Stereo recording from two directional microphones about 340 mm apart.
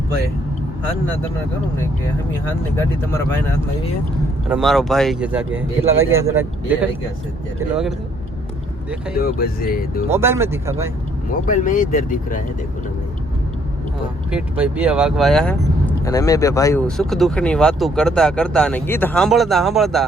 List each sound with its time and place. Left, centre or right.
4.4 s speech: centre
9.1 s speech: left
10.1 s speech: centre
11.4 s speech: left
14.3 s speech: centre